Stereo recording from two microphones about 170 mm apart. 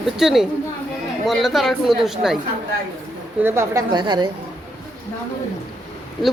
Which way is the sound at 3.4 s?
15° right (ahead or behind).